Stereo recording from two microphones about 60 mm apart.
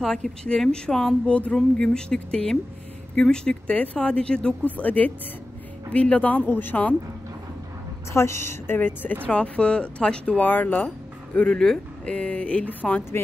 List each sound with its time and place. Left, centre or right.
0.0 s speech: centre; by 7.0 s left
8.1 s a woman's voice: left
8.7 s speech: left
9.2 s speech: left
11.3 s speech: centre
11.6 s speech: centre
12.2 s speech: centre